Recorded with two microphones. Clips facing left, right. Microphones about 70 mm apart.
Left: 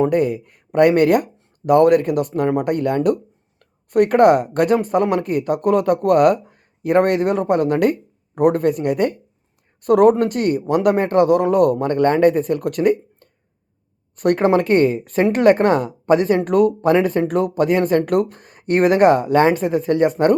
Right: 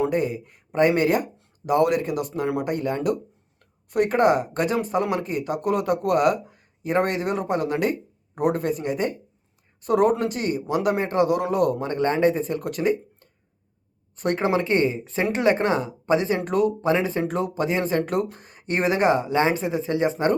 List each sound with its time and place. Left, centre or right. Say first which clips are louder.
0.0 s speech: left 6 dB; left